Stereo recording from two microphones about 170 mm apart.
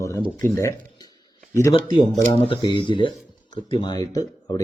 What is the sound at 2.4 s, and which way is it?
Speech, 30° left (ahead or behind).